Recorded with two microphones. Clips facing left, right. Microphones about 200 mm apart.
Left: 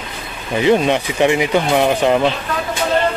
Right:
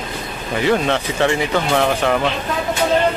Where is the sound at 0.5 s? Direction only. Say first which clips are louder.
Left 3 dB; 20° left (ahead or behind).